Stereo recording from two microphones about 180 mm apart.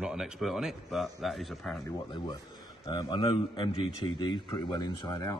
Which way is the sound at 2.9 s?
25° left (ahead or behind).